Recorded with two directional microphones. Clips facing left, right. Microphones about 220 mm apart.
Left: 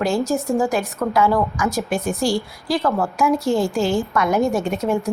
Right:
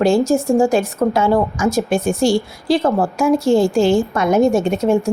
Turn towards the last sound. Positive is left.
turn(degrees=-25)  # may be behind; listen again after turning